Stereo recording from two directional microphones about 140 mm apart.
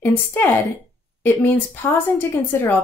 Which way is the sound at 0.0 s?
15° left (ahead or behind).